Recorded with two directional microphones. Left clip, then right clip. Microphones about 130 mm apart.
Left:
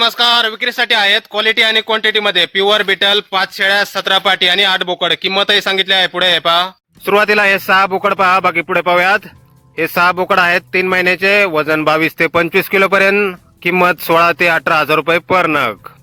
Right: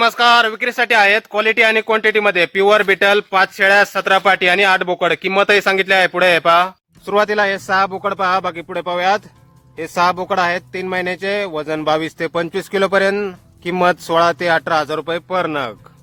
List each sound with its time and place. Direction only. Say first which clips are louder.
0.0 s speech: even; centre (ahead or behind)
7.0 s speech: left 4 dB; 40° left (ahead or behind)